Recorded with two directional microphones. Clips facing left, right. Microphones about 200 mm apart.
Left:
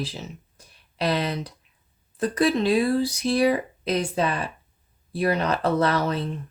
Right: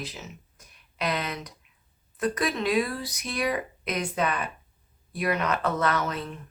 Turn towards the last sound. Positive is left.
turn(degrees=30)  # may be behind; listen again after turning